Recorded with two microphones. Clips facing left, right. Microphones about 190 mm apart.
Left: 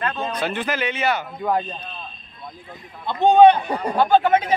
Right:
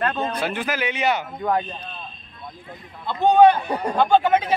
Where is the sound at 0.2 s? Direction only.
10° right (ahead or behind).